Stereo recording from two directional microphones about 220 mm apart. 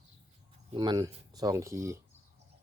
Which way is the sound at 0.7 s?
20° right (ahead or behind).